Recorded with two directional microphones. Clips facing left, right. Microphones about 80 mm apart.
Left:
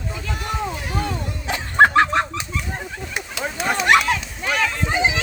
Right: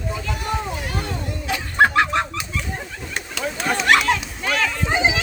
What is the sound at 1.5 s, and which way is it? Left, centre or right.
Fowl, left.